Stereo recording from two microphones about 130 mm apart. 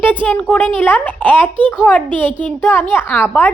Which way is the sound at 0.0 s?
15° left (ahead or behind).